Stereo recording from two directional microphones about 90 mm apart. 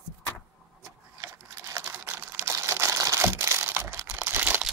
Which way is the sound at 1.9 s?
20° right (ahead or behind).